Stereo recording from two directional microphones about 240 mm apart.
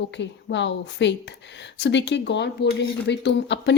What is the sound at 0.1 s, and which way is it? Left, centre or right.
Speech, left.